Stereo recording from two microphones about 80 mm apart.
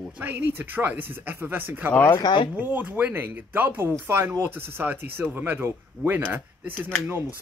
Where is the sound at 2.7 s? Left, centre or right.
Right.